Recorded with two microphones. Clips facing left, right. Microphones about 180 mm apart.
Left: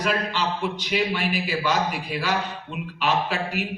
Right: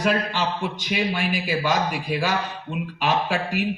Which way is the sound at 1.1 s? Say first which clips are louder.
Right 1 dB; 45° right (ahead or behind).